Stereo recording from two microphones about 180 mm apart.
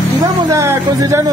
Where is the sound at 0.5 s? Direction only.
15° right (ahead or behind).